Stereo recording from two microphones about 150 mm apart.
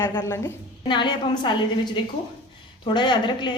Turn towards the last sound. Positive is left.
turn(degrees=30)  # may be behind; listen again after turning